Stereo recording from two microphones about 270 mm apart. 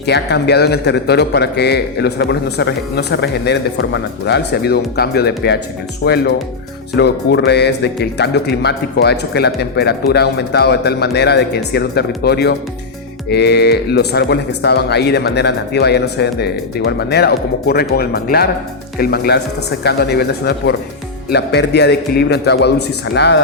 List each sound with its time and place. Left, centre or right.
0.0 s a man's voice: left